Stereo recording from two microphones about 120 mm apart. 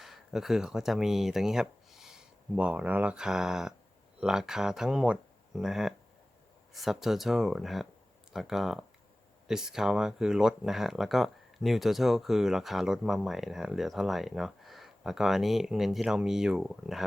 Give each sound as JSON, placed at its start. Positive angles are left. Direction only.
{"t": 0.0, "sound": "speech", "side_deg": 0}